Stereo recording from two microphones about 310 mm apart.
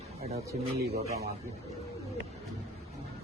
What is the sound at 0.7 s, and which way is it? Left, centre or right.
Speech, right.